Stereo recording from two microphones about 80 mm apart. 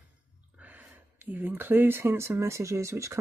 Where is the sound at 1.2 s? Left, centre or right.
Right.